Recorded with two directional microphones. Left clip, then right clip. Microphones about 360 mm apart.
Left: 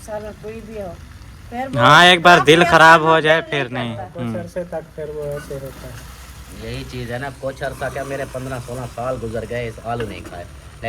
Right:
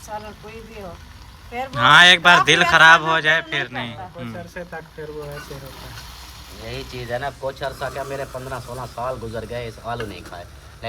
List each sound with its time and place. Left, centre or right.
1.7 s a man's voice: centre
6.7 s speech: right